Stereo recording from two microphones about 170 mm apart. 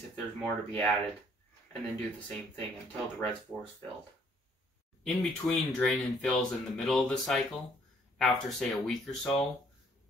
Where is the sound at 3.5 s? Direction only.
15° left (ahead or behind).